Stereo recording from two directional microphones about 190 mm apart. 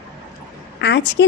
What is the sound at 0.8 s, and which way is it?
Speech, 65° left (ahead or behind).